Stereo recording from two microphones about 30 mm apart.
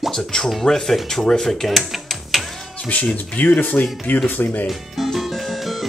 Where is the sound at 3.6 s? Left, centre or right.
Left.